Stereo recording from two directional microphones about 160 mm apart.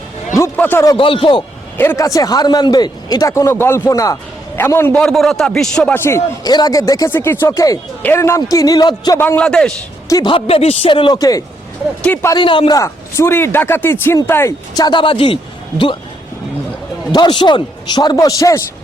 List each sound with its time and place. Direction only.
0.3 s a man's voice: 15° left (ahead or behind)
0.9 s speech: 35° left (ahead or behind)
1.8 s a man's voice: 15° left (ahead or behind)
5.0 s a man's voice: centre (ahead or behind); by 9.2 s 25° left (ahead or behind)
9.2 s a man's voice: 10° left (ahead or behind)
10.1 s a man's voice: 20° left (ahead or behind)
10.3 s a man's voice: 35° left (ahead or behind); by 12.4 s 15° left (ahead or behind)
12.4 s a man's voice: 30° left (ahead or behind)
17.1 s a man's voice: 25° left (ahead or behind)